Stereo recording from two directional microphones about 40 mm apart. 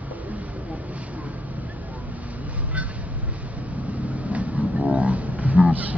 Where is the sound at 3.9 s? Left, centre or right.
Right.